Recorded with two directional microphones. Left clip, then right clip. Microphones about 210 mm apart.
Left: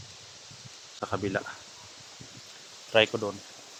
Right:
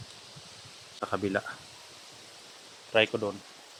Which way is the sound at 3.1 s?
Centre (ahead or behind).